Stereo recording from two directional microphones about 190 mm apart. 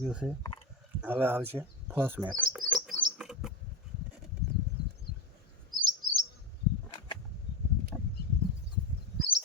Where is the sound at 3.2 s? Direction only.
5° right (ahead or behind).